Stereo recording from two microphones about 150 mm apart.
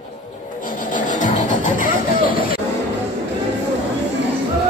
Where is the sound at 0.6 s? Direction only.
60° left (ahead or behind).